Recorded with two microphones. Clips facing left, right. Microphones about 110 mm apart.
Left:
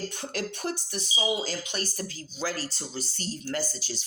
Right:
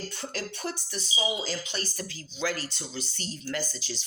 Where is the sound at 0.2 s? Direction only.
50° left (ahead or behind).